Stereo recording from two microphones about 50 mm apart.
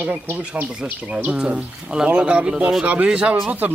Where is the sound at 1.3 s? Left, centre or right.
Centre.